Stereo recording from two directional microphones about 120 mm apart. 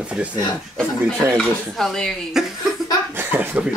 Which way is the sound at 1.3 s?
5° left (ahead or behind).